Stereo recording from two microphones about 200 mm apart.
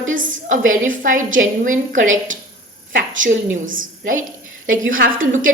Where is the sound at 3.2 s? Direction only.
40° right (ahead or behind).